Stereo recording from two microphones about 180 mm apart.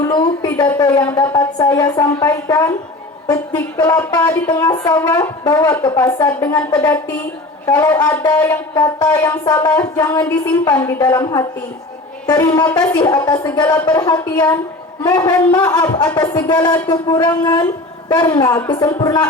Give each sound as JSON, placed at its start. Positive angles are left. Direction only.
{"t": 0.0, "sound": "a sound", "side_deg": 20}
{"t": 1.1, "sound": "speech", "side_deg": 20}
{"t": 4.6, "sound": "speech", "side_deg": 20}
{"t": 6.7, "sound": "music", "side_deg": 20}
{"t": 9.2, "sound": "speech", "side_deg": 25}
{"t": 13.3, "sound": "music", "side_deg": 10}
{"t": 13.8, "sound": "speech", "side_deg": 25}